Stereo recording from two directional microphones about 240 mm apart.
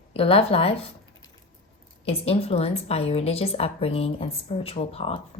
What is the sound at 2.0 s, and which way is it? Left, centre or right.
A woman's voice, left.